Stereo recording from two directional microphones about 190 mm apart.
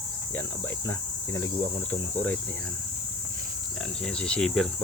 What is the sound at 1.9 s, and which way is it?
Speech, 10° left (ahead or behind).